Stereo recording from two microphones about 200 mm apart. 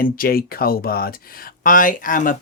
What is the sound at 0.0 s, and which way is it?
Speech, 45° left (ahead or behind).